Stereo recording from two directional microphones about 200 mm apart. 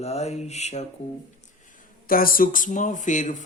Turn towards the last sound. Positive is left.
turn(degrees=40)  # may be behind; listen again after turning